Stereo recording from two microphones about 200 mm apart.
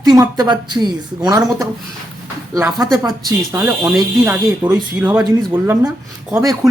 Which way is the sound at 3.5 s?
15° right (ahead or behind).